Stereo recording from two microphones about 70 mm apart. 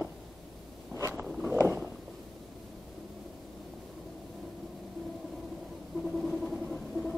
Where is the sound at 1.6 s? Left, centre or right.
Right.